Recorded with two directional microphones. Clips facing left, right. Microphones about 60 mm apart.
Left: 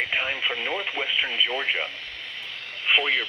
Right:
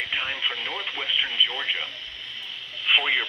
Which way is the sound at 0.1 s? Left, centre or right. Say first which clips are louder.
Left 2 dB; left.